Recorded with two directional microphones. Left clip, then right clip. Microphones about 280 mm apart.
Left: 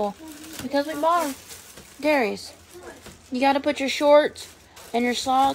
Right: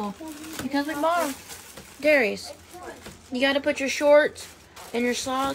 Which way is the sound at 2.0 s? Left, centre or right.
Left.